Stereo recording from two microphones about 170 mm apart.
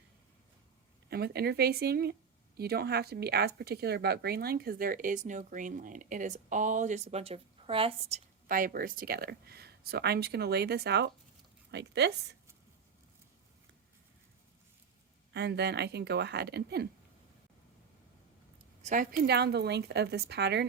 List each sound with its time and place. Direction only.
1.1 s speech: 70° right (ahead or behind); by 8.2 s 35° right (ahead or behind)
8.4 s speech: 55° right (ahead or behind); by 12.1 s 85° right
15.3 s speech: 80° right
18.8 s a woman's voice: 50° right (ahead or behind)
19.3 s speech: 75° right (ahead or behind)